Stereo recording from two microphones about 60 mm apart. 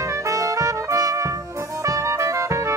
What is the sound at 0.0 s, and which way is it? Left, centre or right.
Trumpet, right.